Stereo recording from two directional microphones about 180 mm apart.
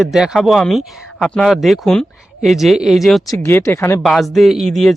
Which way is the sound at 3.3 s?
10° left (ahead or behind).